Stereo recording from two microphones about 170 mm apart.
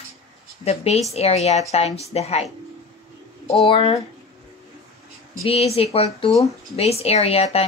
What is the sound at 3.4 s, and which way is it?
Speech, 35° left (ahead or behind).